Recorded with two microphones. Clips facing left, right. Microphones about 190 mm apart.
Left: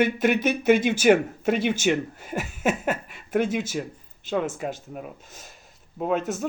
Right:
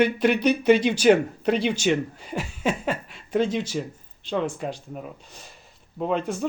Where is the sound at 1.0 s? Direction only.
5° left (ahead or behind).